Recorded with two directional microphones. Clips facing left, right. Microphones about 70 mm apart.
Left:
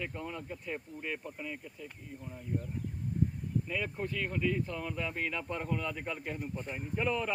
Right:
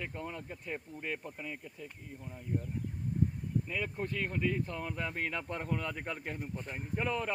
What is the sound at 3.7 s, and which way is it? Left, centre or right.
Speech, right.